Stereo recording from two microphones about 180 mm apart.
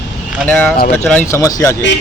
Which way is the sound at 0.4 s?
10° left (ahead or behind).